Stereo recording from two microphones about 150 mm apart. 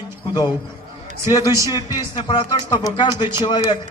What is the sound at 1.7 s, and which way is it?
A man's voice, 30° left (ahead or behind).